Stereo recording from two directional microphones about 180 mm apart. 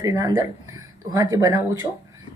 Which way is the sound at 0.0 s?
20° right (ahead or behind).